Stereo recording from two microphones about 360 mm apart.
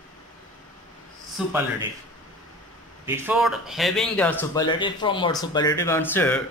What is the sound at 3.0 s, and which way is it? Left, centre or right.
A man's voice, centre.